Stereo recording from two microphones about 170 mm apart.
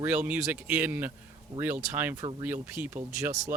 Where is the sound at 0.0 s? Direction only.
10° right (ahead or behind).